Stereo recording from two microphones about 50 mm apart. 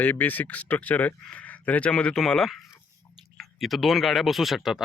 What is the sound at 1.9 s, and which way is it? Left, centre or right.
Speech, centre.